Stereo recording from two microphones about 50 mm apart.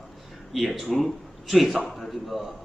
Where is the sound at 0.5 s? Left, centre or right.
Centre.